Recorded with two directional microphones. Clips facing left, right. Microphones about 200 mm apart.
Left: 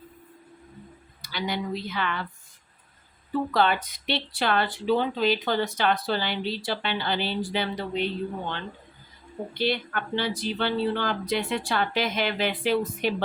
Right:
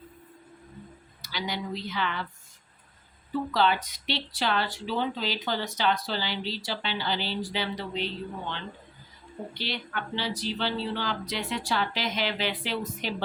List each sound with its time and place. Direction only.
1.2 s speech: 55° left (ahead or behind)
3.5 s speech: 55° left (ahead or behind)
9.6 s speech: 50° left (ahead or behind)